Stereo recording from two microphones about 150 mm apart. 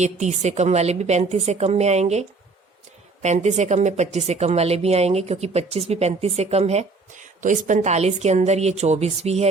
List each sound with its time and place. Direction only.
0.0 s speech: 50° right (ahead or behind)